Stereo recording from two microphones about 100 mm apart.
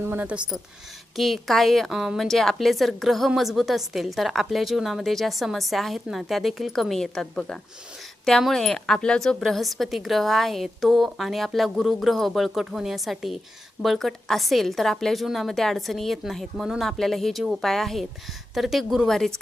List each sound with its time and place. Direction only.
0.0 s speech: 20° right (ahead or behind)
1.1 s a woman's voice: centre (ahead or behind)